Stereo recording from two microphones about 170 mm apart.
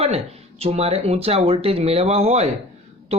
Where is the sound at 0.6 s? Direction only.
35° right (ahead or behind).